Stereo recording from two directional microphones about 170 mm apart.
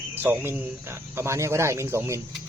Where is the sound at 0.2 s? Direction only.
10° right (ahead or behind).